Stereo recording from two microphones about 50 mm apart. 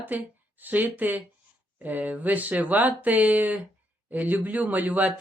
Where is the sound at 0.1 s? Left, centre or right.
Right.